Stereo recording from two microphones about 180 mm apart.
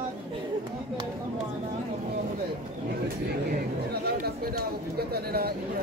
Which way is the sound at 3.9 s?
60° right (ahead or behind).